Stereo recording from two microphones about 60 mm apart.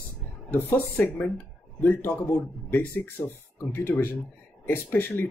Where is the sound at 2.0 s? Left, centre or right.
Left.